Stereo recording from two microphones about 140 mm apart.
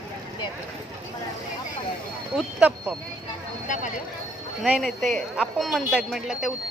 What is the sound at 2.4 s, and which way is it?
Speech, 5° right (ahead or behind).